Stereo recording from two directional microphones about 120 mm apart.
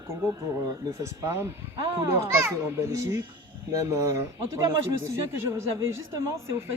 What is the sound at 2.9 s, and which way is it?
Speech, 25° right (ahead or behind).